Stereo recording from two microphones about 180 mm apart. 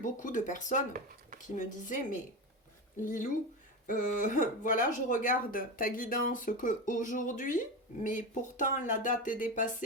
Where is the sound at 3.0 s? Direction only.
50° left (ahead or behind).